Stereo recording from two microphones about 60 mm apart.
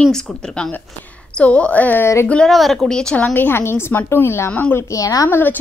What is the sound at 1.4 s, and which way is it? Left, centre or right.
Speech, left.